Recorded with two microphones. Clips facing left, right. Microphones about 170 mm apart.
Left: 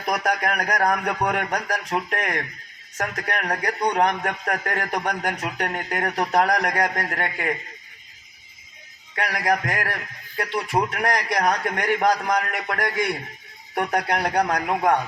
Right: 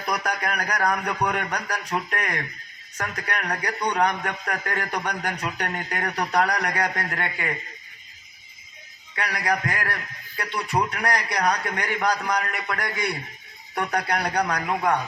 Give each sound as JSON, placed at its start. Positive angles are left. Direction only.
{"t": 0.0, "sound": "speech", "side_deg": 50}
{"t": 9.1, "sound": "speech", "side_deg": 50}